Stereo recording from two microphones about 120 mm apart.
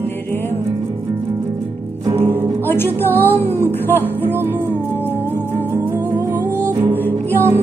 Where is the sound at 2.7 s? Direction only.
20° left (ahead or behind).